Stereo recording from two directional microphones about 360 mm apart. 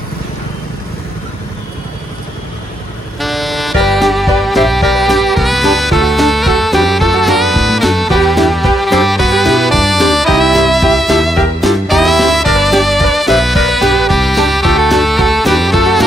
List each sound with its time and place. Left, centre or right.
3.2 s music: centre